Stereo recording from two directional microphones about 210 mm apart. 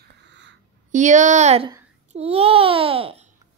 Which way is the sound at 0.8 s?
35° right (ahead or behind).